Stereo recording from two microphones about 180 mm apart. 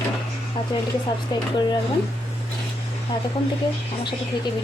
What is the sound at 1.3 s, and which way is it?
Speech, 25° left (ahead or behind).